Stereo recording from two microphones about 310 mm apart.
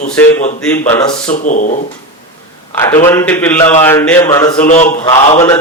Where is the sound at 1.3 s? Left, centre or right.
Left.